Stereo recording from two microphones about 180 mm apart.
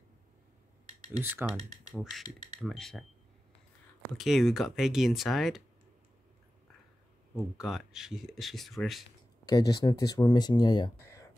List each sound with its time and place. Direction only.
1.2 s speech: 10° right (ahead or behind)
2.0 s speech: centre (ahead or behind)
4.2 s speech: centre (ahead or behind)
7.3 s speech: 5° right (ahead or behind)
9.5 s speech: 20° left (ahead or behind)